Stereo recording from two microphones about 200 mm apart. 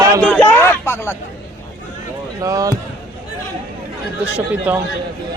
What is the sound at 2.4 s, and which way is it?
Speech, 15° right (ahead or behind).